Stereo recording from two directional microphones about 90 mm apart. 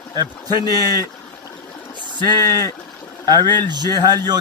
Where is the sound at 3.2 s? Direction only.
50° right (ahead or behind).